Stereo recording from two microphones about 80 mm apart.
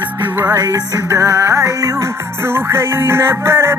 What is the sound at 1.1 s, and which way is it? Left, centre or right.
Music, right.